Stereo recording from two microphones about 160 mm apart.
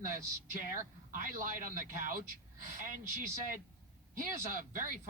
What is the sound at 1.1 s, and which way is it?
Speech, 60° right (ahead or behind).